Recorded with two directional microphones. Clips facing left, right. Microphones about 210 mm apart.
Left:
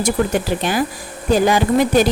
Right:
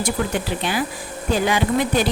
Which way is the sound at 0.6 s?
45° left (ahead or behind).